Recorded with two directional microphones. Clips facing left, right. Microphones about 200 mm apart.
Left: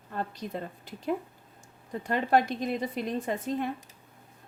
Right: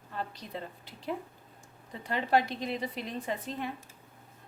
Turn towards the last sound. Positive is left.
turn(degrees=45)  # may be behind; listen again after turning